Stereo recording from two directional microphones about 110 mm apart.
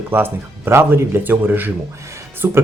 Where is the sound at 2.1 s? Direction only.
20° right (ahead or behind).